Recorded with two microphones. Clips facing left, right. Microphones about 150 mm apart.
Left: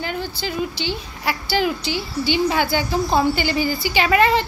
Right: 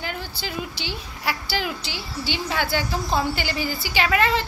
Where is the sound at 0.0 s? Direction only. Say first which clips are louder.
Left 5 dB; 5° right (ahead or behind).